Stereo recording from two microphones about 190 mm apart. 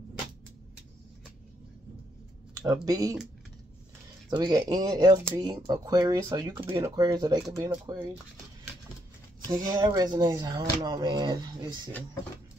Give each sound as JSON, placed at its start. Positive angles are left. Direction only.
{"t": 2.6, "sound": "speech", "side_deg": -20}
{"t": 4.3, "sound": "speech", "side_deg": -20}
{"t": 9.7, "sound": "speech", "side_deg": -20}